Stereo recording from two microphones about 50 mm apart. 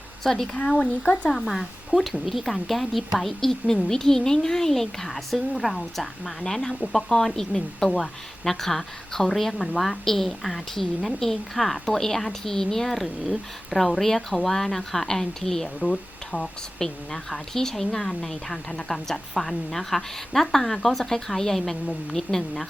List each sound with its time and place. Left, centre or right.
0.2 s speech: centre
1.3 s a woman's voice: centre